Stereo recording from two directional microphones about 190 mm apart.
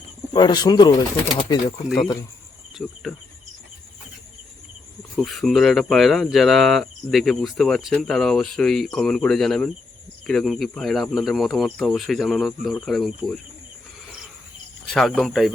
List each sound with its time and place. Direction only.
0.3 s speech: 20° left (ahead or behind)
2.7 s insect: centre (ahead or behind)
5.1 s speech: centre (ahead or behind)
14.8 s speech: centre (ahead or behind)